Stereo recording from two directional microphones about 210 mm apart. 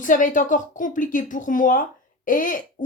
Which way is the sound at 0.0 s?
40° left (ahead or behind).